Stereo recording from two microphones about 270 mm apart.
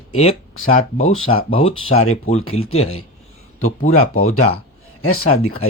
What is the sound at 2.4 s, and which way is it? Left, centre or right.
Speech, left.